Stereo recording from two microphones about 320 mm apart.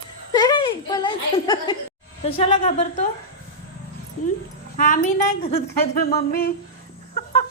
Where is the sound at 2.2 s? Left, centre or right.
Centre.